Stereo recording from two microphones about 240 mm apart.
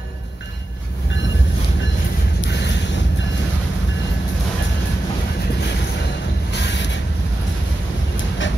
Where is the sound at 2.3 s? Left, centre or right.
Left.